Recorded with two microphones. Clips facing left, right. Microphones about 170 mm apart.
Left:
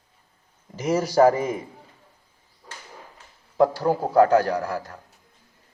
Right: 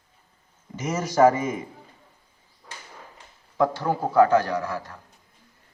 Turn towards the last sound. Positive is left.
turn(degrees=35)  # may be behind; listen again after turning